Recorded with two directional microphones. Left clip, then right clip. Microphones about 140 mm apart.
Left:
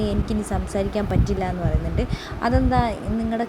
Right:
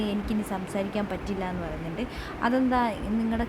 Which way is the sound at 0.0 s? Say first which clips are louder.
Left 5 dB; 15° left (ahead or behind).